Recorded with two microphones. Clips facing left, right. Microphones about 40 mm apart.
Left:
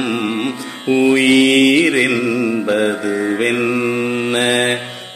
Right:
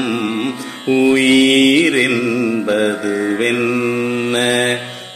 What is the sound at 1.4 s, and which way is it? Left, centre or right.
Mantra, left.